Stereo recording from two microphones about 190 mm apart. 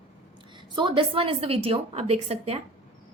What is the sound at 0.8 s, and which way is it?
A woman's voice, 25° right (ahead or behind).